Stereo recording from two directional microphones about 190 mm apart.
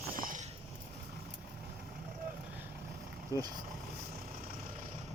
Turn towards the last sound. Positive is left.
turn(degrees=-15)  # may be behind; listen again after turning